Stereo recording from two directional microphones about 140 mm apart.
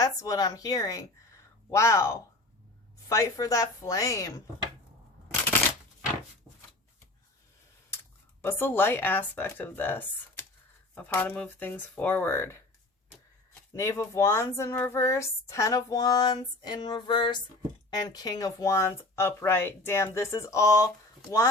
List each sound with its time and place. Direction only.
0.0 s speech: 25° left (ahead or behind)
8.4 s speech: 15° left (ahead or behind)
13.7 s speech: 25° left (ahead or behind)